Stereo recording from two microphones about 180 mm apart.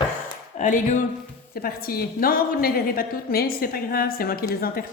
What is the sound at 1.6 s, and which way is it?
A woman's voice, 55° left (ahead or behind).